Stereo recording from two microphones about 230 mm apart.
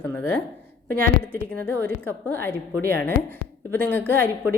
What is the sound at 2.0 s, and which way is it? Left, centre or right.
Speech, centre.